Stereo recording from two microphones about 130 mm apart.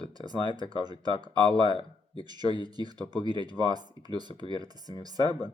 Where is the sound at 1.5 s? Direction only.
40° left (ahead or behind).